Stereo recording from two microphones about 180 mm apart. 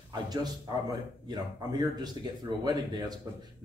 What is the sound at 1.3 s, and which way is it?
Speech, 20° right (ahead or behind).